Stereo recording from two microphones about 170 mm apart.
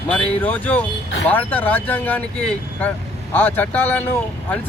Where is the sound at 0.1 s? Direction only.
10° left (ahead or behind).